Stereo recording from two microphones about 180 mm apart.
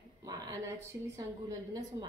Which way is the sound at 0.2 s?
20° right (ahead or behind).